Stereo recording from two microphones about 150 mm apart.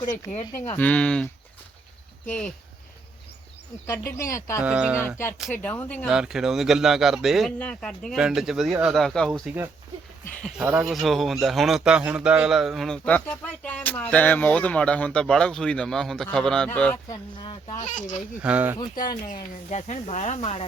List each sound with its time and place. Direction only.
0.1 s speech: 55° left (ahead or behind)
0.8 s speech: 10° left (ahead or behind)
3.8 s speech: 20° left (ahead or behind)
4.6 s speech: 10° right (ahead or behind)
4.9 s speech: 15° left (ahead or behind)
6.1 s speech: 5° right (ahead or behind)
10.6 s speech: 5° right (ahead or behind); by 17.0 s 10° left (ahead or behind)
17.1 s speech: 30° left (ahead or behind)
17.7 s speech: 55° left (ahead or behind)
18.4 s speech: 10° right (ahead or behind)
19.3 s speech: 50° left (ahead or behind)